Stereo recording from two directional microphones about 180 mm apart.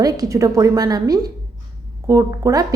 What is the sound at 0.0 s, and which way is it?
A woman's voice, 20° right (ahead or behind).